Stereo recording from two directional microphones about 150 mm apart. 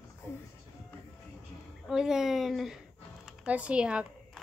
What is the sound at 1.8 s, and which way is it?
Speech, 5° right (ahead or behind).